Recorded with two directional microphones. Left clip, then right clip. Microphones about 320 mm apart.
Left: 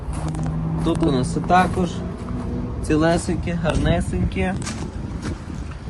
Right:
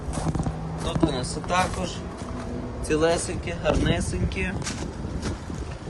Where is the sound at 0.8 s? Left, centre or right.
Centre.